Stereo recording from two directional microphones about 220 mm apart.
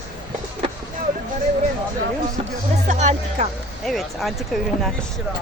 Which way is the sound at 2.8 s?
35° right (ahead or behind).